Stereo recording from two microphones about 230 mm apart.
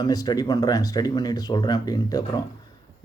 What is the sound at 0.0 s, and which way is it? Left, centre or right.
Speech, centre.